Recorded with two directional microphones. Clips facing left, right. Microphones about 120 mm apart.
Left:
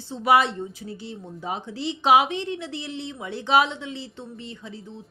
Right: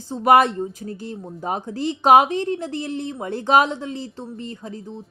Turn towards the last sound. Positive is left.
turn(degrees=-40)  # may be behind; listen again after turning